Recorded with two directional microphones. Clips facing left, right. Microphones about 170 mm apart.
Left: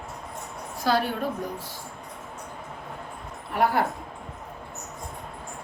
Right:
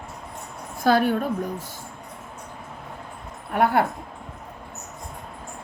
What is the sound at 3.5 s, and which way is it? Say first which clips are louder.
Speech: right 3 dB; 55° right (ahead or behind).